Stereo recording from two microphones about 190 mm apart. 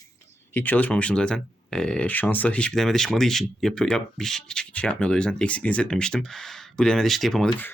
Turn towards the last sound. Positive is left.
turn(degrees=5)  # may be behind; listen again after turning